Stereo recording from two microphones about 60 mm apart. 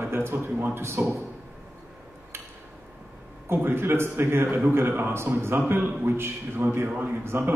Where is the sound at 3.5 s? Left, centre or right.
Right.